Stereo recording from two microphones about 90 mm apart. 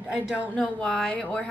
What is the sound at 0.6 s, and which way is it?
Speech, 10° left (ahead or behind).